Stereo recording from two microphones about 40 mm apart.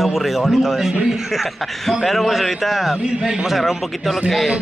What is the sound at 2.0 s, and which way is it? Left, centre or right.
Speech, centre.